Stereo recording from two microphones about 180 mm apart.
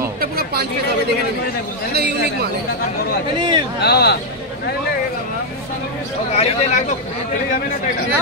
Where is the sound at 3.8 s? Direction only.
65° left (ahead or behind).